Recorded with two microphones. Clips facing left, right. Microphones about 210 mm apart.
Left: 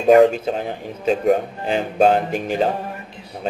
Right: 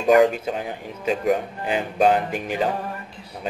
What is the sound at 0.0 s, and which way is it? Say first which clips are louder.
Speech: left 4 dB; 25° left (ahead or behind).